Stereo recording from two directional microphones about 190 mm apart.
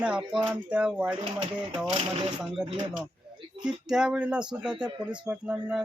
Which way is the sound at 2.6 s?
35° right (ahead or behind).